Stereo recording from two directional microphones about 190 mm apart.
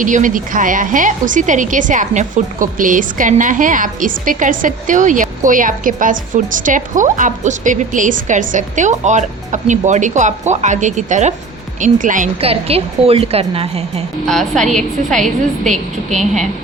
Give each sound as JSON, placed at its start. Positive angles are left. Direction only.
{"t": 0.0, "sound": "a woman's voice", "side_deg": -45}
{"t": 14.3, "sound": "a woman's voice", "side_deg": 0}
{"t": 15.2, "sound": "a woman's voice", "side_deg": -40}